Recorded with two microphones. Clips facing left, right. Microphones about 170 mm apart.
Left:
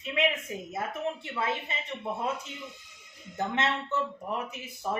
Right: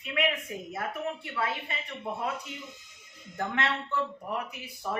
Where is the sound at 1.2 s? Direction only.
25° left (ahead or behind).